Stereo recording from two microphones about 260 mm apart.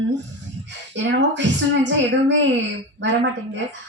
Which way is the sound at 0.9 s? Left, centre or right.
Right.